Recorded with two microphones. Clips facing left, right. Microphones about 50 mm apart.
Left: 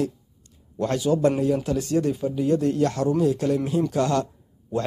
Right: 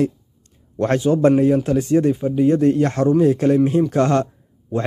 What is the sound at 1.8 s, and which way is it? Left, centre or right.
Speech, right.